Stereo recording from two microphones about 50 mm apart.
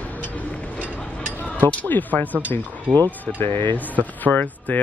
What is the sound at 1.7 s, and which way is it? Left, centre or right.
Speech, left.